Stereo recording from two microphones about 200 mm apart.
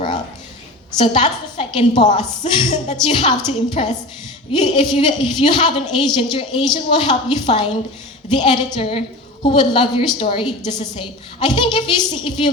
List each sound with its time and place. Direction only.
0.9 s a woman's voice: 25° left (ahead or behind)